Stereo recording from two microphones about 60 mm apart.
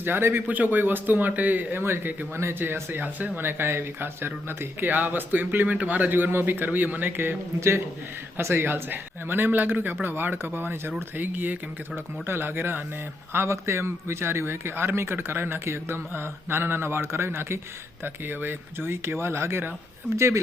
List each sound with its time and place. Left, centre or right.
0.0 s speech: right
0.4 s speech: right
8.4 s a man's voice: right
8.6 s speech: right
13.3 s a man's voice: right